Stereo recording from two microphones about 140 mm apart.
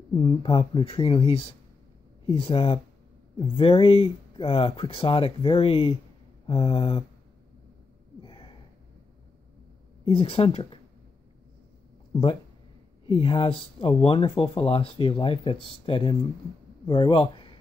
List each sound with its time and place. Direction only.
0.1 s speech: 35° left (ahead or behind)
8.2 s a sound: 35° left (ahead or behind)
10.0 s speech: 40° left (ahead or behind)
12.1 s speech: 35° left (ahead or behind)